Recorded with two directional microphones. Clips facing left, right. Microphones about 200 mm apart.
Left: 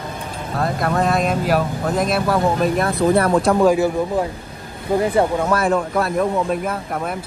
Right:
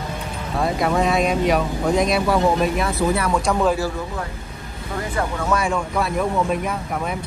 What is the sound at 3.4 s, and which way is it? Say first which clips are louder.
Speech: left 5 dB; 15° left (ahead or behind).